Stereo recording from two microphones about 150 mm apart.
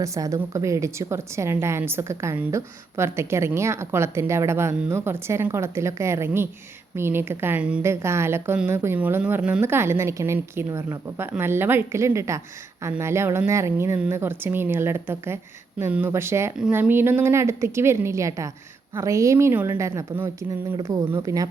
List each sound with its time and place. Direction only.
0.0 s a woman's voice: 20° right (ahead or behind)
16.6 s a woman's voice: 5° right (ahead or behind); by 21.4 s 20° right (ahead or behind)